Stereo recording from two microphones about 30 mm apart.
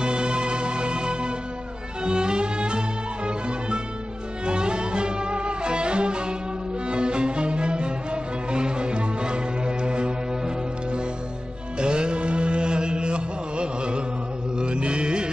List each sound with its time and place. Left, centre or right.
0.0 s music: right